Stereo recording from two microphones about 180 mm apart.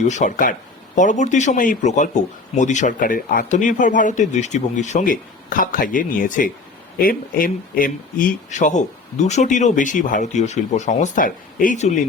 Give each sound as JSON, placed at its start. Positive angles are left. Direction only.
{"t": 0.1, "sound": "a man's voice", "side_deg": 45}